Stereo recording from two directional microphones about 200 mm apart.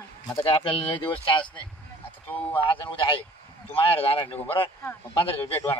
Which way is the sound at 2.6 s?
25° left (ahead or behind).